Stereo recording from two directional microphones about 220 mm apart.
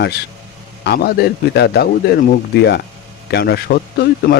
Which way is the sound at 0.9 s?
45° left (ahead or behind).